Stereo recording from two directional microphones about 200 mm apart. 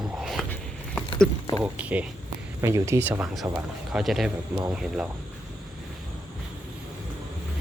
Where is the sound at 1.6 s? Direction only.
5° right (ahead or behind).